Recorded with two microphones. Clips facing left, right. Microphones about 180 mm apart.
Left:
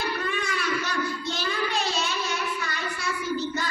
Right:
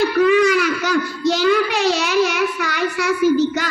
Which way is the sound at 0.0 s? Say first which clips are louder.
Right 16 dB; 90° right.